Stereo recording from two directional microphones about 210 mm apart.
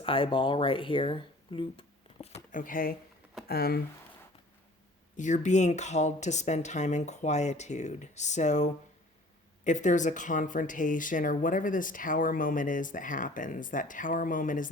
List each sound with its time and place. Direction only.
0.0 s speech: 25° left (ahead or behind); by 3.8 s 45° left (ahead or behind)
5.1 s speech: 35° left (ahead or behind)